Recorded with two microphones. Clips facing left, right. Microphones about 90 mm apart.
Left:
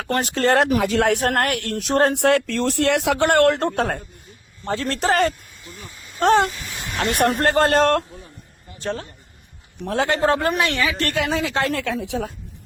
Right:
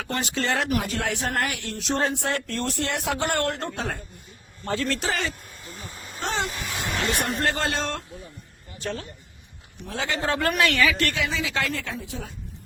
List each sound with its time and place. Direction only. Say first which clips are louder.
0.2 s a man's voice: left 8 dB; 45° left (ahead or behind)
0.5 s speech: left 9 dB; 80° left
4.6 s a man's voice: left 4 dB; 35° left (ahead or behind); by 5.3 s 50° left (ahead or behind)
6.1 s speech: left 12 dB; 60° left (ahead or behind)
8.8 s speech: left 5 dB; 35° left (ahead or behind)
9.8 s a man's voice: left 8 dB; 55° left (ahead or behind)
10.4 s speech: left 1 dB; 25° left (ahead or behind)
11.0 s a man's voice: left 4 dB; 55° left (ahead or behind)
11.7 s speech: left 8 dB; 70° left (ahead or behind)